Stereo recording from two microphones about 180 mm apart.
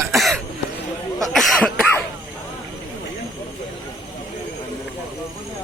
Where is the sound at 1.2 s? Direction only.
5° left (ahead or behind).